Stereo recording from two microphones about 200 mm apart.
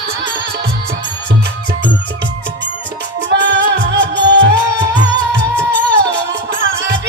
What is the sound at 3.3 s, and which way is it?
Music, 60° right (ahead or behind).